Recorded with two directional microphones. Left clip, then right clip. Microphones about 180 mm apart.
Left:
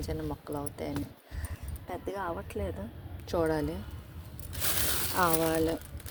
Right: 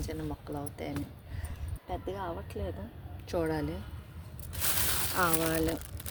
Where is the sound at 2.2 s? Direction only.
15° left (ahead or behind).